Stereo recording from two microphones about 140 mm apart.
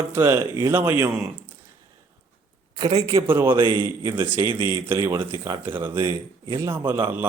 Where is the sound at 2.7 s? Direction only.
45° right (ahead or behind).